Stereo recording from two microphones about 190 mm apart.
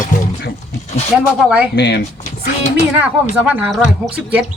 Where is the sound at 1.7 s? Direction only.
60° left (ahead or behind).